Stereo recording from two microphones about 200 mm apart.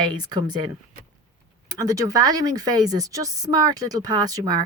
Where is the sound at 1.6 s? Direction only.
20° right (ahead or behind).